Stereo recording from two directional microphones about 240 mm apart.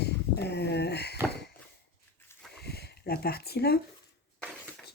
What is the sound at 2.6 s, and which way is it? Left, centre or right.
Speech, left.